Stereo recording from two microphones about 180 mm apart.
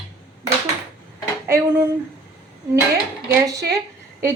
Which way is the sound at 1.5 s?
15° right (ahead or behind).